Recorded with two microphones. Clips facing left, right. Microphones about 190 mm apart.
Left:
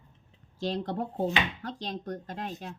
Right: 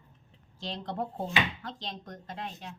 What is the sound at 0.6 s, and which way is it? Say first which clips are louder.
A woman's voice: left 4 dB; 40° left (ahead or behind).